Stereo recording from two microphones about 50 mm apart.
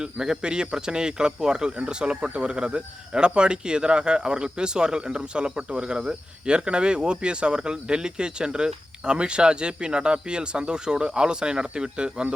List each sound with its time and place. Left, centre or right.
0.0 s speech: centre